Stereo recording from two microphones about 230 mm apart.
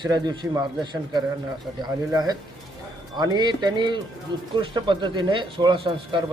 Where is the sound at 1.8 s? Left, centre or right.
Centre.